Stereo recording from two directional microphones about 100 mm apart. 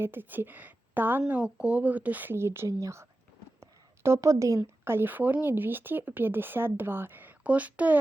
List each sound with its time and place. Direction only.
0.0 s speech: 20° right (ahead or behind)